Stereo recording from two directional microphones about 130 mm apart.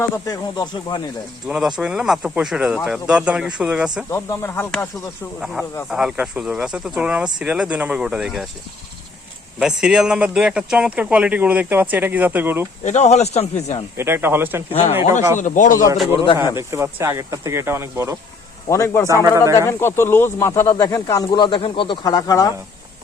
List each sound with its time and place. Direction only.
0.0 s speech: 30° left (ahead or behind)
1.5 s speech: 5° right (ahead or behind)
4.4 s speech: 15° left (ahead or behind)
5.9 s speech: 5° right (ahead or behind)
9.6 s speech: 5° right (ahead or behind)
12.8 s speech: 60° left (ahead or behind)
13.9 s speech: 20° right (ahead or behind)
14.7 s speech: 50° left (ahead or behind)
15.4 s a man's voice: 75° left (ahead or behind)
16.2 s speech: 35° left (ahead or behind)
16.6 s speech: 20° right (ahead or behind)
18.7 s speech: 25° left (ahead or behind)
19.0 s speech: 25° right (ahead or behind)
19.5 s speech: 20° left (ahead or behind)